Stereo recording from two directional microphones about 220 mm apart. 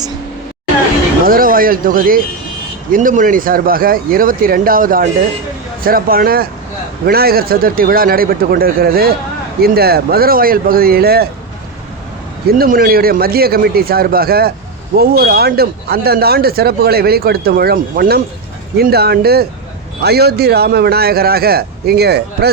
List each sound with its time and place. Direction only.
1.2 s speech: 40° right (ahead or behind)
12.5 s speech: 40° right (ahead or behind)